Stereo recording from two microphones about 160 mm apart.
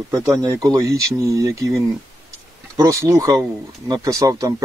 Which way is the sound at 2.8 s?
20° right (ahead or behind).